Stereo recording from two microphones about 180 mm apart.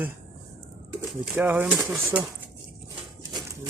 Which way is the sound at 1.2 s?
10° right (ahead or behind).